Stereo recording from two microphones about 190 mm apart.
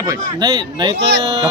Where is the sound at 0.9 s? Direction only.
65° right (ahead or behind).